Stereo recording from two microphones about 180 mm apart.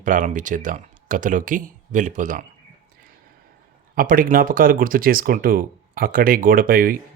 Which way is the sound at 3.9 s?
50° right (ahead or behind).